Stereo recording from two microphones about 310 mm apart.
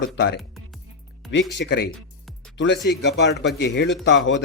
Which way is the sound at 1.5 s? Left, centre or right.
Left.